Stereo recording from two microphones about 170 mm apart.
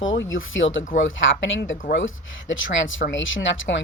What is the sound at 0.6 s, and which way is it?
Speech, 90° left.